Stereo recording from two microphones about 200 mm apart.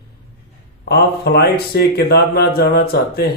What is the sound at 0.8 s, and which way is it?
Speech, 50° left (ahead or behind).